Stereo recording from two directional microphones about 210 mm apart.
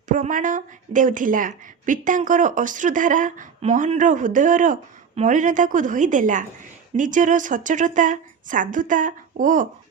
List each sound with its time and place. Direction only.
0.1 s a woman's voice: 40° right (ahead or behind)